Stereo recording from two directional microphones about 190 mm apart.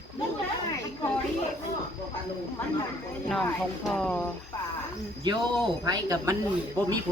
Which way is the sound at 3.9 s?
Centre (ahead or behind).